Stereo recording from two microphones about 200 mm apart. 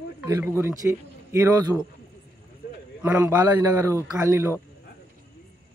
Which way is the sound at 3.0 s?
10° right (ahead or behind).